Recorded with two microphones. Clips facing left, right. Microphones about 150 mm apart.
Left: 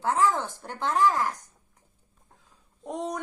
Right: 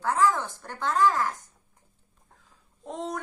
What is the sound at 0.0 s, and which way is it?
Speech, 20° left (ahead or behind).